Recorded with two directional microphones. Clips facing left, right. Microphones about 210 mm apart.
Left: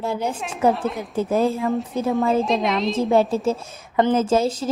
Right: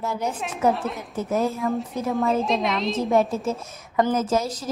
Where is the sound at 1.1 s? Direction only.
30° left (ahead or behind).